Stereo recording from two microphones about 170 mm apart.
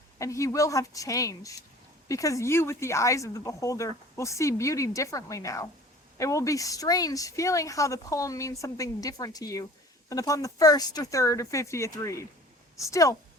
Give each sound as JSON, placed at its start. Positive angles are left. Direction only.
{"t": 0.2, "sound": "speech", "side_deg": 20}